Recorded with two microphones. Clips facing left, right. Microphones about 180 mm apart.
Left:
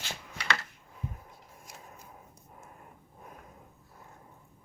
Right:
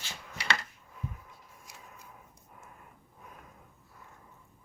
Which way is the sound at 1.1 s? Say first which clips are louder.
Left 1 dB; 40° left (ahead or behind).